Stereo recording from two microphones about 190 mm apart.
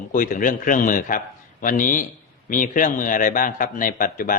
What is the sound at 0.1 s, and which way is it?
A man's voice, 45° left (ahead or behind).